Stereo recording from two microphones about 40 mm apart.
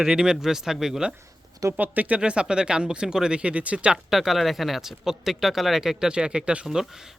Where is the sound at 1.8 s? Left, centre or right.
Right.